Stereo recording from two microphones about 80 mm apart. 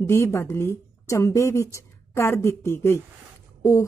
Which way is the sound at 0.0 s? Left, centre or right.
Left.